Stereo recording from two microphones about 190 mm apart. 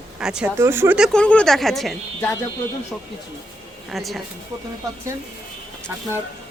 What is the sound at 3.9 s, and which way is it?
Speech, centre (ahead or behind).